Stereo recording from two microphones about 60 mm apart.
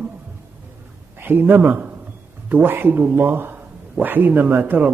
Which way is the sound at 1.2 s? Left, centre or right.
Right.